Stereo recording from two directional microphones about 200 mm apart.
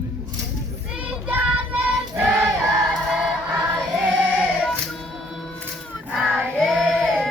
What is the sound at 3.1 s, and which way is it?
Music, 5° right (ahead or behind).